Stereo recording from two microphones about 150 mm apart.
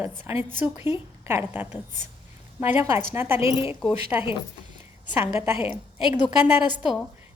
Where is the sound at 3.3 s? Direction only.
40° left (ahead or behind).